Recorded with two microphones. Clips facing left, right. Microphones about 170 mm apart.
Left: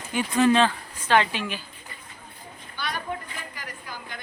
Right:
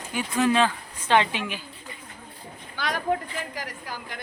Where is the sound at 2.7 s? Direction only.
90° right.